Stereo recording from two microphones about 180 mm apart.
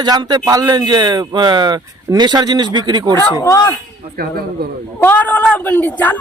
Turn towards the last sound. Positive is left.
turn(degrees=10)  # may be behind; listen again after turning